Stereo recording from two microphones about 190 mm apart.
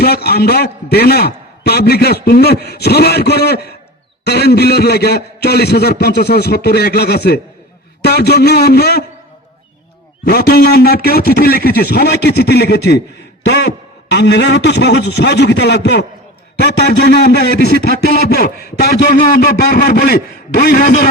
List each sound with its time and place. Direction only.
0.0 s a man's voice: 55° left (ahead or behind)
10.2 s a man's voice: 55° left (ahead or behind)
14.1 s a man's voice: 65° left (ahead or behind)